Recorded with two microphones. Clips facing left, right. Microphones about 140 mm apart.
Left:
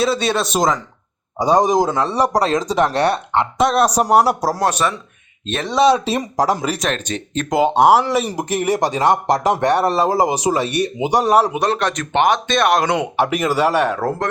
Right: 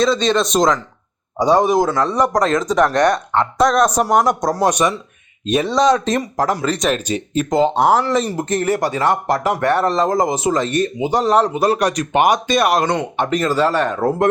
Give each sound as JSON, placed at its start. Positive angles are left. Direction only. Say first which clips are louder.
{"t": 0.0, "sound": "speech", "louder": "right 2 dB", "side_deg": 10}
{"t": 2.6, "sound": "speech", "louder": "right 2 dB", "side_deg": 35}
{"t": 4.2, "sound": "speech", "louder": "even", "side_deg": 5}
{"t": 4.6, "sound": "speech", "louder": "right 4 dB", "side_deg": -15}
{"t": 5.7, "sound": "speech", "louder": "left 2 dB", "side_deg": 10}
{"t": 6.7, "sound": "speech", "louder": "right 3 dB", "side_deg": -5}
{"t": 7.5, "sound": "speech", "louder": "left 2 dB", "side_deg": 10}
{"t": 11.6, "sound": "speech", "louder": "right 3 dB", "side_deg": -10}